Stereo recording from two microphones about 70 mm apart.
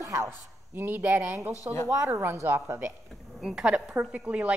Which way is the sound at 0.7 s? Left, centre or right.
Right.